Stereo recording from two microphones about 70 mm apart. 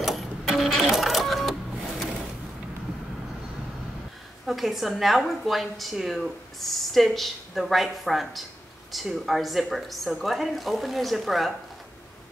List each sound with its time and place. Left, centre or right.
0.0 s music: centre
4.5 s a woman's voice: centre